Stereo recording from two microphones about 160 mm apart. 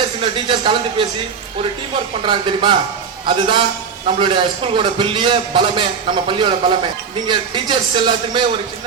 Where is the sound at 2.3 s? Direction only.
30° right (ahead or behind).